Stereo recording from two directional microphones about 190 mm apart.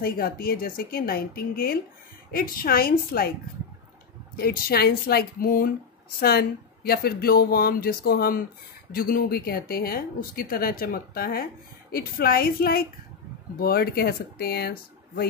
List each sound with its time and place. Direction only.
0.0 s speech: 50° left (ahead or behind)
4.4 s speech: 55° left (ahead or behind)